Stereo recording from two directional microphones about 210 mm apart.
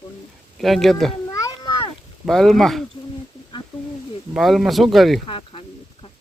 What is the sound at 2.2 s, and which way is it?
Speech, centre (ahead or behind).